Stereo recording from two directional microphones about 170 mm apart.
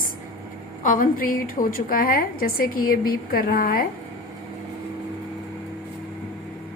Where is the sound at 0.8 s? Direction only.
50° left (ahead or behind).